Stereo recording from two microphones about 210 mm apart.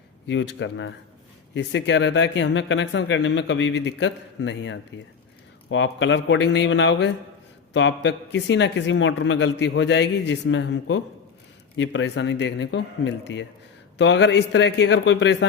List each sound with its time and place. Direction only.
0.3 s speech: 60° left (ahead or behind)